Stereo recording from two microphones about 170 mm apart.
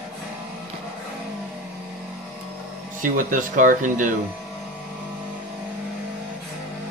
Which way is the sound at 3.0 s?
50° right (ahead or behind).